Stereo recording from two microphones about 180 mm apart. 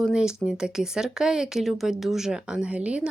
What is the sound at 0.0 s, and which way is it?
Speech, 5° right (ahead or behind).